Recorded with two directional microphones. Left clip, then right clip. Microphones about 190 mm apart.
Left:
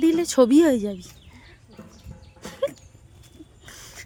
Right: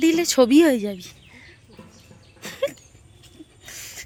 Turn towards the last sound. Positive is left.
turn(degrees=15)  # may be behind; listen again after turning